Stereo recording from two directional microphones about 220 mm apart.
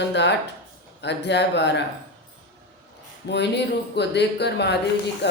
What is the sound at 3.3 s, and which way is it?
Speech, 50° left (ahead or behind).